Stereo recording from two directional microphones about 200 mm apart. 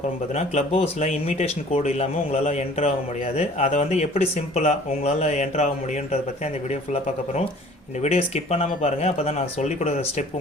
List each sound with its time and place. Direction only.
0.3 s speech: 30° left (ahead or behind)
8.0 s speech: 30° left (ahead or behind)